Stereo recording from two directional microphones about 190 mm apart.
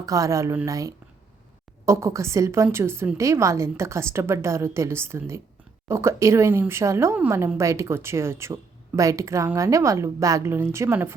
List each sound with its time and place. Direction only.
0.0 s a woman's voice: 20° right (ahead or behind)